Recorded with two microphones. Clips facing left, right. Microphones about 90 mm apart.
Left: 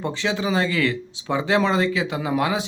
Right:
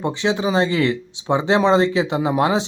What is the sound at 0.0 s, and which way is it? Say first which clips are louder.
Speech: right 4 dB; 20° right (ahead or behind).